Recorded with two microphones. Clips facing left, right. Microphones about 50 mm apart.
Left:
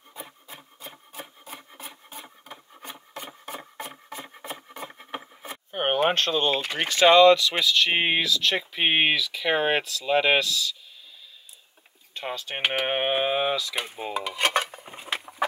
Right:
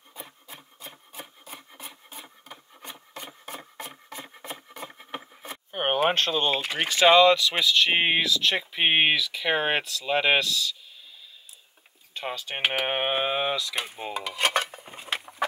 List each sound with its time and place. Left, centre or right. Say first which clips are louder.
0.1 s rub: left 2 dB; centre
6.1 s speech: left 1 dB; centre
12.1 s speech: even; centre